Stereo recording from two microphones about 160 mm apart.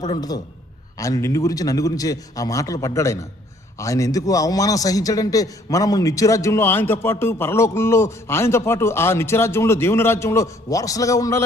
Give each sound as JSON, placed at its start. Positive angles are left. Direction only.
{"t": 0.1, "sound": "a man's voice", "side_deg": 25}